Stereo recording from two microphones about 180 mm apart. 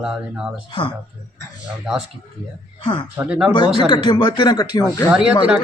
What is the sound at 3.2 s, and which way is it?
Speech, 5° right (ahead or behind).